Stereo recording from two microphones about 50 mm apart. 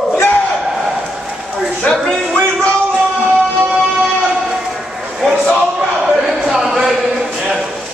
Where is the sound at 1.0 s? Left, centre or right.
Centre.